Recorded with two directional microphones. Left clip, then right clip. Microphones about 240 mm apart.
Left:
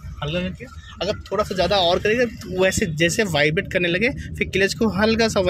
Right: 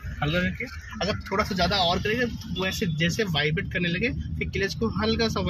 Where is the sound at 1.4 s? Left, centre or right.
Centre.